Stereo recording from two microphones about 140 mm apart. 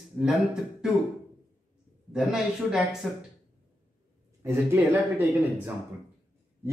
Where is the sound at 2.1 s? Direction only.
5° right (ahead or behind).